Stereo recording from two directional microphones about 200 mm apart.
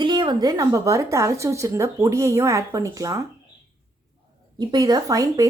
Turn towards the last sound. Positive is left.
turn(degrees=-15)  # may be behind; listen again after turning